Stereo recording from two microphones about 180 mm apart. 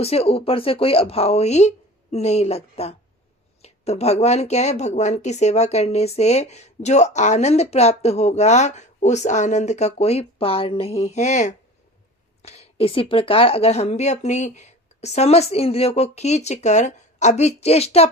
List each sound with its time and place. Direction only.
0.0 s speech: 35° left (ahead or behind)